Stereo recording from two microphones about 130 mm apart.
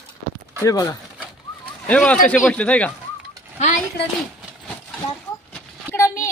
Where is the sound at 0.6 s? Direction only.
25° left (ahead or behind).